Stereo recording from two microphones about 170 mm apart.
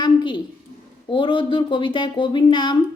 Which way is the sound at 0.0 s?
30° left (ahead or behind).